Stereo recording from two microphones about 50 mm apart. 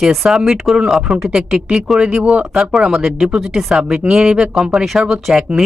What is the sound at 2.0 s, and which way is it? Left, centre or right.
Speech, right.